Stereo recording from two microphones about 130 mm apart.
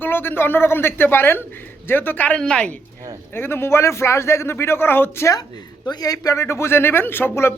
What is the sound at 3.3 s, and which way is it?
A man's voice, 20° left (ahead or behind).